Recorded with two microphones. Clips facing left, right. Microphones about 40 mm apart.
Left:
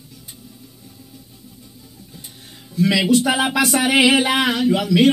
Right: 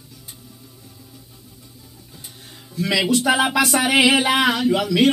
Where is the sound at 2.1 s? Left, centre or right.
Centre.